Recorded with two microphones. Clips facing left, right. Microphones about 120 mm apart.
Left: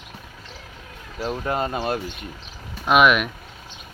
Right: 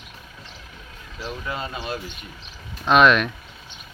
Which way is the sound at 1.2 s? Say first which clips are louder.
Left 6 dB; 45° left (ahead or behind).